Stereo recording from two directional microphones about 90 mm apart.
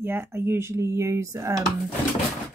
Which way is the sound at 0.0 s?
25° right (ahead or behind).